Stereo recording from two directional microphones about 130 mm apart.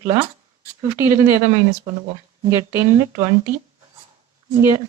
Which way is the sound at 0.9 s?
20° right (ahead or behind).